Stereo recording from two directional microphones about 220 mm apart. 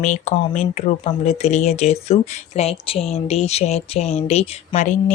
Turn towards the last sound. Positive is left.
turn(degrees=35)  # may be behind; listen again after turning